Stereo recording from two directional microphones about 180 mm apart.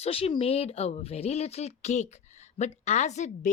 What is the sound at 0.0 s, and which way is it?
Speech, 30° left (ahead or behind).